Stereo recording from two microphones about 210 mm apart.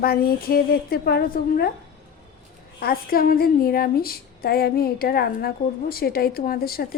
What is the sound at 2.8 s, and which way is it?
A woman's voice, 45° left (ahead or behind).